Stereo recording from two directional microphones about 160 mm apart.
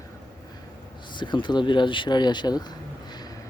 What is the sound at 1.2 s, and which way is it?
Speech, 30° left (ahead or behind).